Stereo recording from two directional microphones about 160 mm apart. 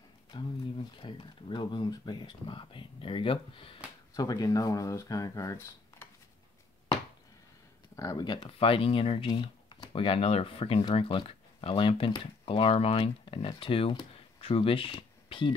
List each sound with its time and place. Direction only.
0.3 s speech: 30° left (ahead or behind)
7.9 s speech: 20° left (ahead or behind)